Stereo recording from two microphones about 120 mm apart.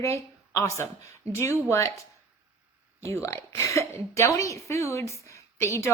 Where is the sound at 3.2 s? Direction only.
25° left (ahead or behind).